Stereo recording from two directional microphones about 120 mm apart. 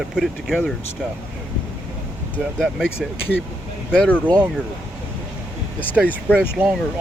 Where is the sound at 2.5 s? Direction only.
5° right (ahead or behind).